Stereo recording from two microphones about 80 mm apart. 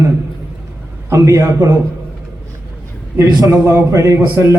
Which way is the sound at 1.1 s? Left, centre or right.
Right.